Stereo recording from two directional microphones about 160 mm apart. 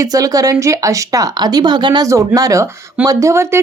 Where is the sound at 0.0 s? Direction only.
20° right (ahead or behind).